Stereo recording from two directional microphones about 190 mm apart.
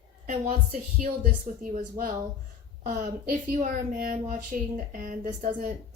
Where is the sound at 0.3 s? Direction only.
40° right (ahead or behind).